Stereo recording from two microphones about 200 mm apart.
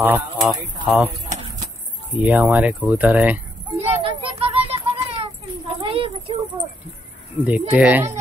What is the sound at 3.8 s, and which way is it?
Children playing, 30° right (ahead or behind).